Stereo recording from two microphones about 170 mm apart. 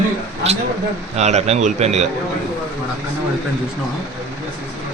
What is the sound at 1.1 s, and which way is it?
Speech, 40° right (ahead or behind).